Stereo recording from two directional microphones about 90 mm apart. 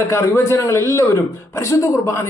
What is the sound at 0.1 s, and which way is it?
A man's voice, 35° left (ahead or behind).